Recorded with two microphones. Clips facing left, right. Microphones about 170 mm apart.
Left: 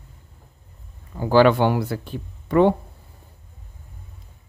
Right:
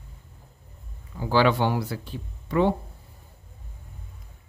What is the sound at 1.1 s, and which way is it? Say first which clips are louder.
Speech: left 6 dB; 55° left (ahead or behind).